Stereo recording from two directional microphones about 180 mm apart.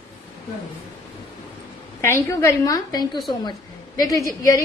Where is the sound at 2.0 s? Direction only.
15° left (ahead or behind).